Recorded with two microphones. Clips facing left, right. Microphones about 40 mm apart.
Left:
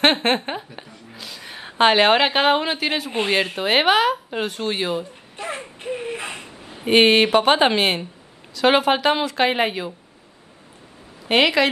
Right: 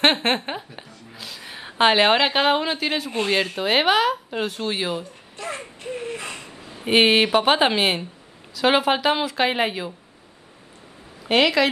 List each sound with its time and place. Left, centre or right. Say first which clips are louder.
0.0 s a woman's voice: left 1 dB; centre
3.1 s speech: left 1 dB; centre
5.3 s a sound: left 1 dB; left
6.8 s a woman's voice: left 2 dB; centre
11.2 s speech: left 1 dB; centre